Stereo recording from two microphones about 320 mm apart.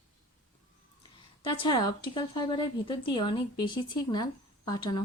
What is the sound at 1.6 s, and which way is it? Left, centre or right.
A woman's voice, centre.